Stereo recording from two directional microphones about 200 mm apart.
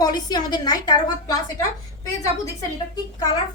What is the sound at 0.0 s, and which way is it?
A child's voice, 20° left (ahead or behind).